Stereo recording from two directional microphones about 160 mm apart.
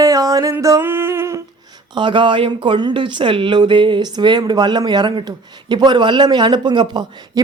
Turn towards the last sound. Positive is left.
turn(degrees=-25)  # may be behind; listen again after turning